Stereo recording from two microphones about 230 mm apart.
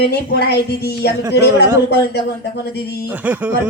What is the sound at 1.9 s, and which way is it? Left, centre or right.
Speech, left.